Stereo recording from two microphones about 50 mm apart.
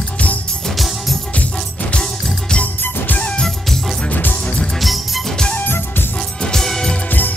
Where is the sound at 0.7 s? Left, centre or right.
Centre.